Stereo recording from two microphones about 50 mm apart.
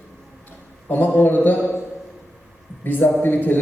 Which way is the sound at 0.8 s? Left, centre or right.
Left.